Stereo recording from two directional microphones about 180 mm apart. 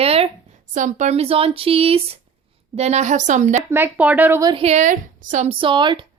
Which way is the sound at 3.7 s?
10° right (ahead or behind).